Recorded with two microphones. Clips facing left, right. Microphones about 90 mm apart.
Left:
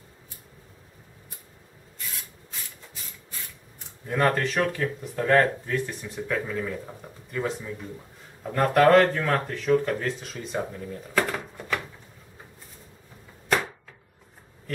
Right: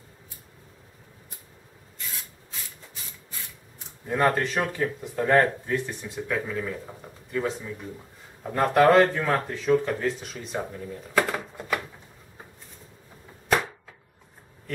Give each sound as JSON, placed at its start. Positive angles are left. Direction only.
{"t": 4.3, "sound": "speech", "side_deg": -15}
{"t": 6.1, "sound": "speech", "side_deg": 0}
{"t": 8.5, "sound": "speech", "side_deg": -10}
{"t": 13.5, "sound": "chopping", "side_deg": -5}